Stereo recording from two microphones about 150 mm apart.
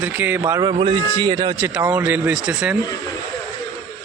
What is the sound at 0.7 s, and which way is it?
Speech, 35° right (ahead or behind).